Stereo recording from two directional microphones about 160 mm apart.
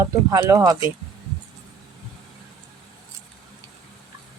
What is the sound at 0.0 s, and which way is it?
Speech, 25° right (ahead or behind).